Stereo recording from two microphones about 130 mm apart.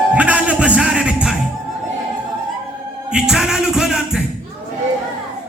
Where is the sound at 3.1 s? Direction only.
5° right (ahead or behind).